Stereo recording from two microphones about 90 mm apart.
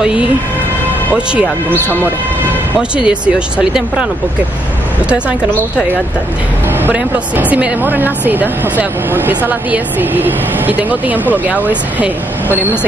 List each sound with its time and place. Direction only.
1.1 s speech: 10° right (ahead or behind)
3.0 s speech: 10° right (ahead or behind)
6.7 s speech: 20° right (ahead or behind)